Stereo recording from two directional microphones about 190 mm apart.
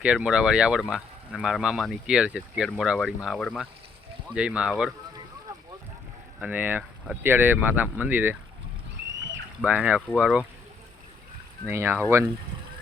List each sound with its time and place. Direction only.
0.0 s speech: 5° right (ahead or behind)
6.4 s speech: 10° right (ahead or behind)
9.6 s speech: 5° right (ahead or behind)
11.7 s speech: 15° right (ahead or behind)